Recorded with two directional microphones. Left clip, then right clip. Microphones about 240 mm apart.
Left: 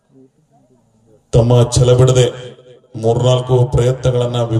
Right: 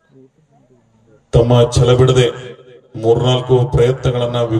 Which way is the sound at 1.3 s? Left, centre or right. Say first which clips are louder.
Right 1 dB; left.